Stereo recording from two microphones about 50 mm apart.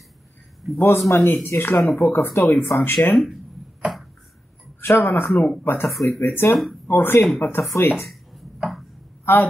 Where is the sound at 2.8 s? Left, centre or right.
Left.